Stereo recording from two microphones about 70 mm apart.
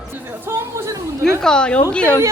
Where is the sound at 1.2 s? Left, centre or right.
Centre.